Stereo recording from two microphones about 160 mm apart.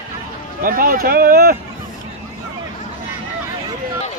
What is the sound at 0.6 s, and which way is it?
Speech, 60° right (ahead or behind).